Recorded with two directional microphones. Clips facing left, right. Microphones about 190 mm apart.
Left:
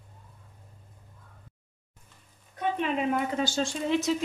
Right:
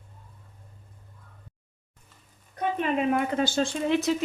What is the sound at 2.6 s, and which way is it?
Speech, 55° right (ahead or behind).